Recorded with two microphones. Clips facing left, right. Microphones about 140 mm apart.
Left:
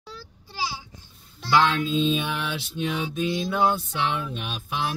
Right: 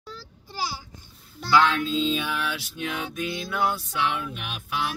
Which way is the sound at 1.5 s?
25° left (ahead or behind).